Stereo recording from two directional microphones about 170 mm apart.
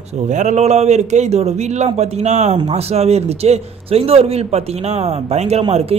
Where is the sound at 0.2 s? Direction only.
45° right (ahead or behind).